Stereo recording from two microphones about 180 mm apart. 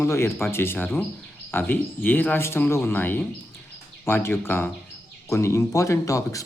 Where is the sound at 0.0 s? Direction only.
15° left (ahead or behind).